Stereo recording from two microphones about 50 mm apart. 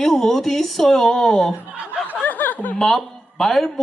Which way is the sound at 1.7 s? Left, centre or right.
Right.